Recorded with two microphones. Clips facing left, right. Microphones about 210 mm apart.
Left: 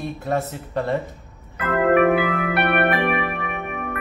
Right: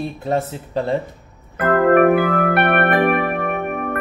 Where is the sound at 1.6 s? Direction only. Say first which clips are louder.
Right 4 dB; 50° right (ahead or behind).